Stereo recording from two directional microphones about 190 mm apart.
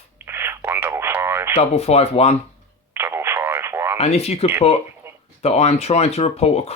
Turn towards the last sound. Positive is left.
turn(degrees=35)  # may be behind; listen again after turning